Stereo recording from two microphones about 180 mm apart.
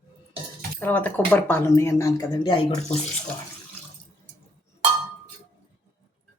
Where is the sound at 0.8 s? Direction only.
10° left (ahead or behind).